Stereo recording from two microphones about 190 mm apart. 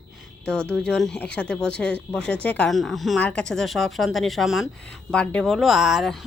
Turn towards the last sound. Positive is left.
turn(degrees=0)  # may be behind; listen again after turning